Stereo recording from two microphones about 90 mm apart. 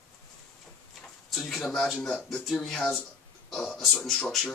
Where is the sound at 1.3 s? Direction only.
Centre (ahead or behind).